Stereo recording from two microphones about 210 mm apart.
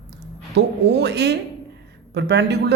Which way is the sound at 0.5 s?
55° right (ahead or behind).